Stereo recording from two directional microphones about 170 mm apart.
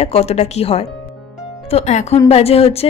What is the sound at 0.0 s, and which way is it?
A woman's voice, 35° left (ahead or behind).